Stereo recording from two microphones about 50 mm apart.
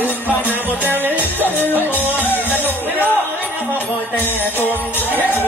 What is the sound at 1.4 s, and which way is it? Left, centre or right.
Music, left.